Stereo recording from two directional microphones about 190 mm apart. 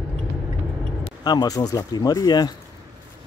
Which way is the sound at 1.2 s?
20° left (ahead or behind).